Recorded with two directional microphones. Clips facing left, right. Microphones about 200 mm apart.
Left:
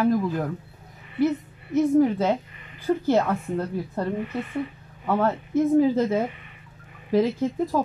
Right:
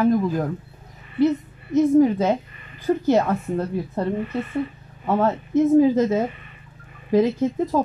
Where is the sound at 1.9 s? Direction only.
20° right (ahead or behind).